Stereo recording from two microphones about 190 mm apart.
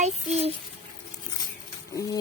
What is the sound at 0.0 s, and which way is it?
Speech, 35° right (ahead or behind).